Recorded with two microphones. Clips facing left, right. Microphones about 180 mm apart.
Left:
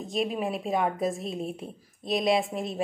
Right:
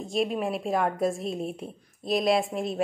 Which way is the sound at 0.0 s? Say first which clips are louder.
Right 2 dB; centre (ahead or behind).